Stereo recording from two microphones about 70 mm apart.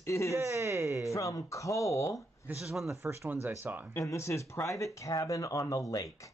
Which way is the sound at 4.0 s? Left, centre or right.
Left.